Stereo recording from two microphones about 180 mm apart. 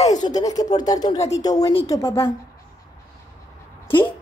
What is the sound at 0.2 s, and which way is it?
Speech, 20° left (ahead or behind).